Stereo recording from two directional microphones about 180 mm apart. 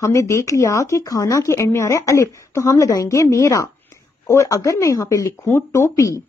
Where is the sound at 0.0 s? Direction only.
15° left (ahead or behind).